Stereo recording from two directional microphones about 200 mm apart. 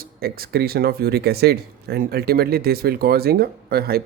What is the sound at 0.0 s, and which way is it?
Speech, 50° right (ahead or behind).